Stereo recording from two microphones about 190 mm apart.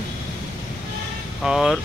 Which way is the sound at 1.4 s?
Centre (ahead or behind).